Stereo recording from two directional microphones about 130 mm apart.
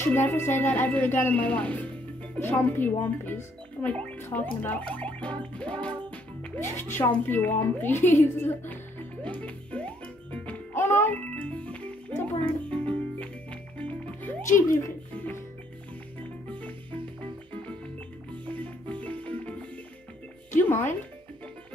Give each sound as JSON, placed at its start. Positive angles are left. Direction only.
{"t": 0.0, "sound": "speech", "side_deg": 15}
{"t": 9.2, "sound": "music", "side_deg": 10}
{"t": 18.5, "sound": "music", "side_deg": 10}
{"t": 20.5, "sound": "music", "side_deg": 15}